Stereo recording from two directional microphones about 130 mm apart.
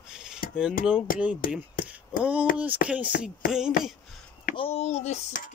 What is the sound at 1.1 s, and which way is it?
Speech, 90° left.